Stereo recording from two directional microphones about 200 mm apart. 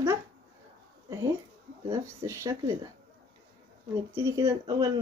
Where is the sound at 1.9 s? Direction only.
15° right (ahead or behind).